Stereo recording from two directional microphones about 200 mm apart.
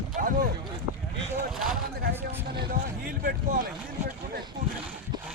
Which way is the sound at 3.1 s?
45° right (ahead or behind).